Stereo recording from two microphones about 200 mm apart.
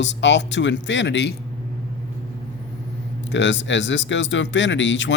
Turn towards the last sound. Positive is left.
turn(degrees=65)  # may be behind; listen again after turning